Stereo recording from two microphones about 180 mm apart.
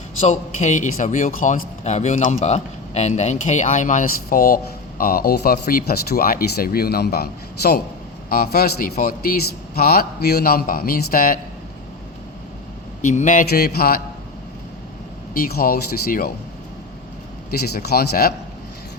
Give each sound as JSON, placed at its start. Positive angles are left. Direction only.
{"t": 0.2, "sound": "a man's voice", "side_deg": 40}
{"t": 13.0, "sound": "speech", "side_deg": 45}
{"t": 13.5, "sound": "a man's voice", "side_deg": 60}
{"t": 15.3, "sound": "a man's voice", "side_deg": 55}
{"t": 17.7, "sound": "a man's voice", "side_deg": 60}